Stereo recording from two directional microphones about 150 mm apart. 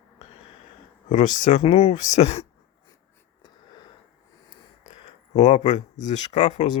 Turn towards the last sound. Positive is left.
turn(degrees=50)  # may be behind; listen again after turning